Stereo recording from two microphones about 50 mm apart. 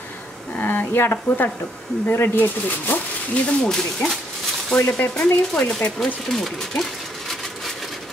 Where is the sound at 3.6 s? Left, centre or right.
Centre.